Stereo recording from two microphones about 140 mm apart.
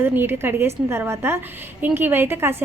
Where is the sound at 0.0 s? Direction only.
15° right (ahead or behind).